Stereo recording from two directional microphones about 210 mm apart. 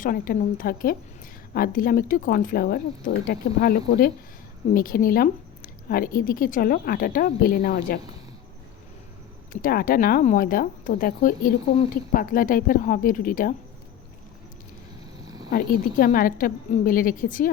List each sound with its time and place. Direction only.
0.0 s speech: 40° left (ahead or behind)
9.5 s speech: 40° left (ahead or behind)
15.3 s a sound: 20° right (ahead or behind)
15.5 s speech: 40° left (ahead or behind)